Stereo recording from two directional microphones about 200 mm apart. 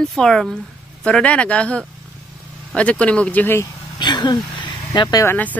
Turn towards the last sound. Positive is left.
turn(degrees=10)  # may be behind; listen again after turning